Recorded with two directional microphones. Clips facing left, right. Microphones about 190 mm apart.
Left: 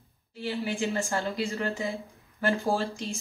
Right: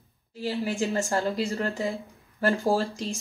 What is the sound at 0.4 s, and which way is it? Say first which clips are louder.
Speech: right 2 dB; 35° right (ahead or behind).